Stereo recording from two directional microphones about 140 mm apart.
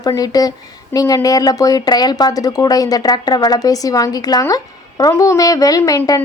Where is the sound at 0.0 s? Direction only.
25° left (ahead or behind).